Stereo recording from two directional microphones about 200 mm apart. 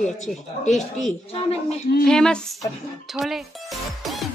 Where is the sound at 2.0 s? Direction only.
5° left (ahead or behind).